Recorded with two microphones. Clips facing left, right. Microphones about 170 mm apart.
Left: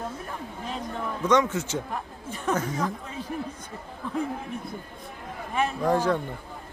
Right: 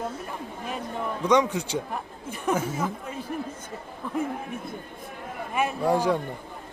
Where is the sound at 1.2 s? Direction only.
15° right (ahead or behind).